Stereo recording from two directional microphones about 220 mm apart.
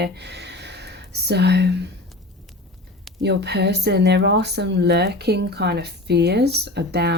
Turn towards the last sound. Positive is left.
turn(degrees=-50)  # may be behind; listen again after turning